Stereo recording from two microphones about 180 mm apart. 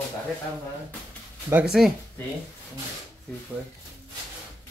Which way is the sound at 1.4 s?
5° right (ahead or behind).